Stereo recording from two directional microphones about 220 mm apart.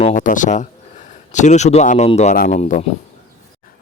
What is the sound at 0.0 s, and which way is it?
Speech, 35° left (ahead or behind).